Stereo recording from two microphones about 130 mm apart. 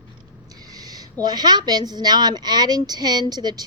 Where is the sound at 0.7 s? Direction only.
30° right (ahead or behind).